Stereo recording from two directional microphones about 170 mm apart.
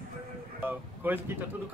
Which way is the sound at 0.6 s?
10° right (ahead or behind).